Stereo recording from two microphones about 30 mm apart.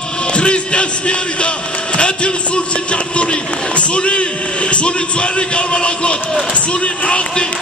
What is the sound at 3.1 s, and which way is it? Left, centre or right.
A man's voice, left.